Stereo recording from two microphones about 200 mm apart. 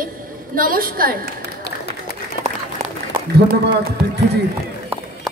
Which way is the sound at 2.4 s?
40° left (ahead or behind).